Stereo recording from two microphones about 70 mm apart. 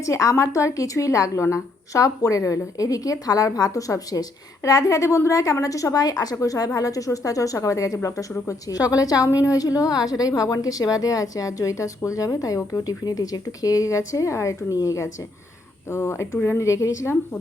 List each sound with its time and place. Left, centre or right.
0.0 s a woman's voice: left
6.4 s a woman's voice: left
13.1 s speech: left
16.6 s speech: left